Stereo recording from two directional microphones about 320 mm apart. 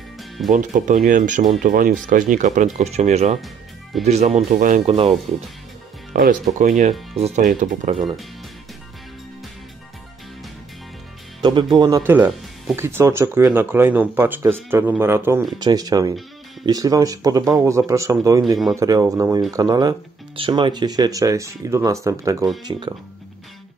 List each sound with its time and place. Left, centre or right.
0.5 s speech: right
6.1 s speech: right
11.4 s speech: centre